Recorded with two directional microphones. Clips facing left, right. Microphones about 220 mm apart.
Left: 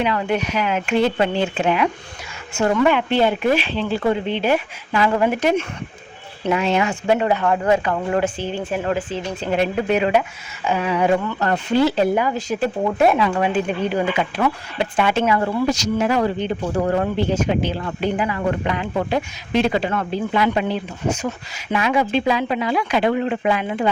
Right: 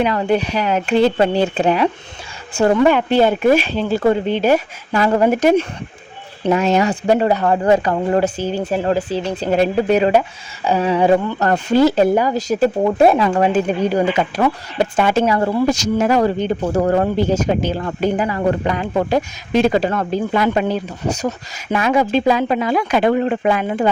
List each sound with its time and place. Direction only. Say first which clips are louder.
0.0 s speech: right 4 dB; 35° right (ahead or behind)